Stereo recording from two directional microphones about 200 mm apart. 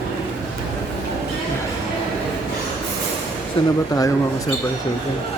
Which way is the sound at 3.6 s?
25° left (ahead or behind).